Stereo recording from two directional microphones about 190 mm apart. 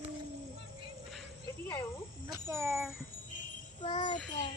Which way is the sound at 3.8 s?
40° left (ahead or behind).